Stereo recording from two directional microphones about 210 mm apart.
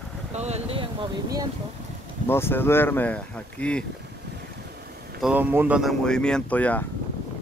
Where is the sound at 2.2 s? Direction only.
10° left (ahead or behind).